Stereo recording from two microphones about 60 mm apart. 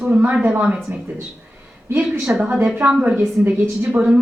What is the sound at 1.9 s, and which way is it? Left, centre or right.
Speech, right.